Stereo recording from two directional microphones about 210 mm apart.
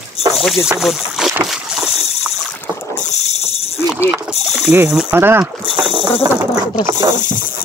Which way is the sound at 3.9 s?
5° right (ahead or behind).